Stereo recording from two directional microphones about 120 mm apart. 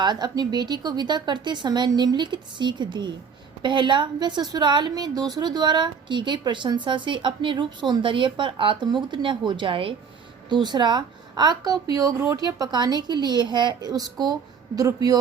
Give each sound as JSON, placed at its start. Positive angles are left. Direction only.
{"t": 0.0, "sound": "a woman's voice", "side_deg": -35}